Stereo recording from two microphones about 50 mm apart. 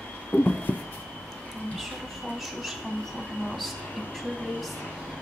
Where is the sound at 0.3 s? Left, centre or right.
Left.